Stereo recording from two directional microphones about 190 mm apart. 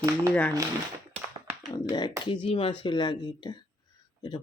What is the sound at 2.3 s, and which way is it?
Speech, 25° left (ahead or behind).